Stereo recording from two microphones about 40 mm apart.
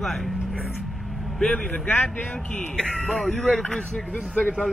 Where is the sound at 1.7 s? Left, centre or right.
Left.